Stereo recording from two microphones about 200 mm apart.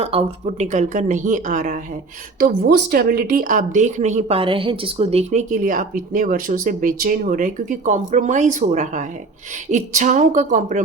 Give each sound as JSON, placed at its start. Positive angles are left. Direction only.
{"t": 0.0, "sound": "speech", "side_deg": -30}